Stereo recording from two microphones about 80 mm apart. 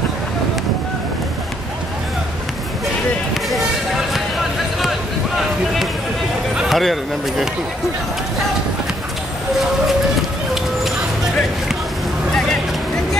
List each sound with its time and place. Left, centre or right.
3.4 s music: centre
6.5 s speech: centre